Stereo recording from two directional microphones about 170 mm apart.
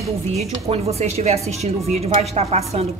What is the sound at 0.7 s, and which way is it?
Dishes, 40° right (ahead or behind).